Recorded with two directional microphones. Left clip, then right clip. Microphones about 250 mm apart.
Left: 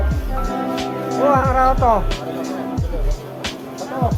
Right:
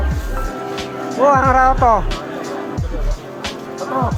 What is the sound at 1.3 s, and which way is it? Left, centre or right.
Music, right.